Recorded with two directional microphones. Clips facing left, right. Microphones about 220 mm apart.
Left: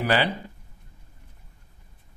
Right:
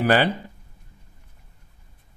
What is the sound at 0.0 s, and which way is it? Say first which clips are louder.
Speech: right 4 dB; 50° right (ahead or behind).